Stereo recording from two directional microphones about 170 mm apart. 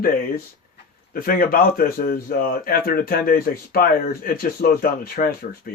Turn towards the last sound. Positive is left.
turn(degrees=60)  # may be behind; listen again after turning